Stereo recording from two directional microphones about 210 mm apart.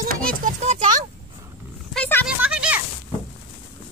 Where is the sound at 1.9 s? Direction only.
5° left (ahead or behind).